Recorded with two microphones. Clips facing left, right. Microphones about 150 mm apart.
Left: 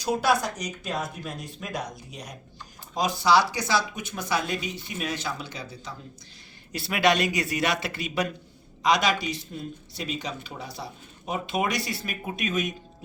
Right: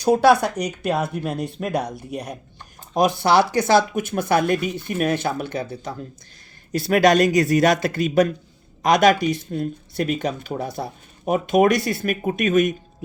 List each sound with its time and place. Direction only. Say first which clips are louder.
0.0 s speech: right 9 dB; 60° right (ahead or behind)
6.7 s speech: right 8 dB; 45° right (ahead or behind)